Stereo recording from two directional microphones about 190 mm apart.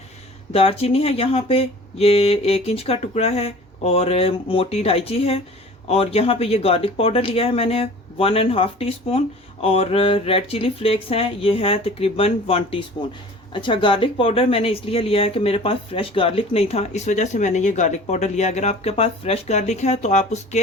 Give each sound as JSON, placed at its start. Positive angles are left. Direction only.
{"t": 0.5, "sound": "speech", "side_deg": 30}